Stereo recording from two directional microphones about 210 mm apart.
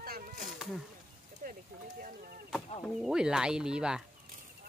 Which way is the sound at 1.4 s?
40° right (ahead or behind).